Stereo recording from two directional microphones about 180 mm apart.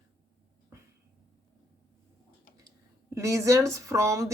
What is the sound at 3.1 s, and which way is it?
Speech, 15° right (ahead or behind).